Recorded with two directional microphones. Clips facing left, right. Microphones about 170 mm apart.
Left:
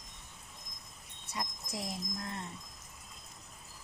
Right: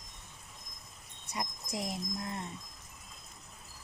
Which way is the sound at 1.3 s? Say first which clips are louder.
Right 2 dB; 20° right (ahead or behind).